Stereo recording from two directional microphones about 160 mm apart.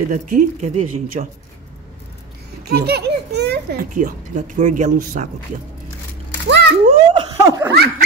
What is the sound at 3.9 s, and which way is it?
Speech, 50° right (ahead or behind).